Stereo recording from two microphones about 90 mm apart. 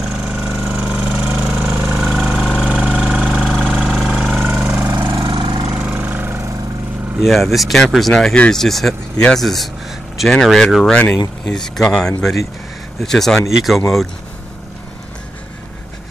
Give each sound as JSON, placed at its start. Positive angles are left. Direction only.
{"t": 0.0, "sound": "engine", "side_deg": -5}
{"t": 0.7, "sound": "vehicle", "side_deg": -15}
{"t": 2.0, "sound": "engine", "side_deg": 0}
{"t": 4.6, "sound": "a sound", "side_deg": -20}
{"t": 5.3, "sound": "engine", "side_deg": -65}
{"t": 5.8, "sound": "a sound", "side_deg": -20}
{"t": 7.2, "sound": "speech", "side_deg": 0}